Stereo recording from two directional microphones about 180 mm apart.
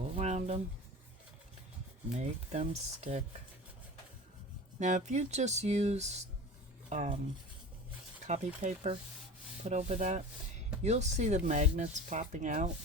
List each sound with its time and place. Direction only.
0.2 s a sound: 40° right (ahead or behind)
2.1 s speech: 40° right (ahead or behind)
4.8 s speech: 45° right (ahead or behind)
8.3 s speech: 40° right (ahead or behind)